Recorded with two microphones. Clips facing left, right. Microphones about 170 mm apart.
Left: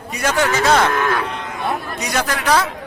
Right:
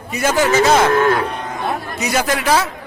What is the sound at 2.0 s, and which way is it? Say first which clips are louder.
Speech: right 5 dB; 5° right (ahead or behind).